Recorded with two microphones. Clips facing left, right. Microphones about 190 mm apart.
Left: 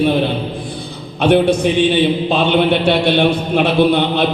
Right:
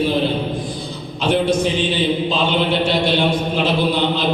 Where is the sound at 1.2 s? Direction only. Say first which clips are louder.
Left 5 dB; 60° left (ahead or behind).